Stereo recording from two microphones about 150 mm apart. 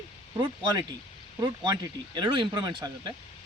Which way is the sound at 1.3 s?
25° right (ahead or behind).